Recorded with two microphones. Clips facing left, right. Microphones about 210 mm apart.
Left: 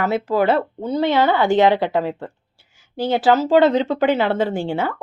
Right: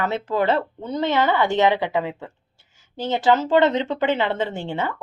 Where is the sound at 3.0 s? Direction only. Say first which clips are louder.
Left 3 dB; 10° left (ahead or behind).